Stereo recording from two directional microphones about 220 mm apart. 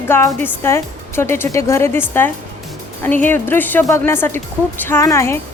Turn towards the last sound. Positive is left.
turn(degrees=10)  # may be behind; listen again after turning